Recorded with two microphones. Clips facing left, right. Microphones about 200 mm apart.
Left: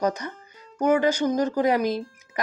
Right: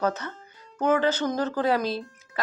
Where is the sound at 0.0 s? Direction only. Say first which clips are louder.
Left 2 dB; 15° left (ahead or behind).